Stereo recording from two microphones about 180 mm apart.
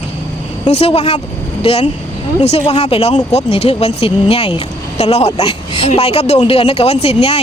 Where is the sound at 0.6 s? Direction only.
35° left (ahead or behind).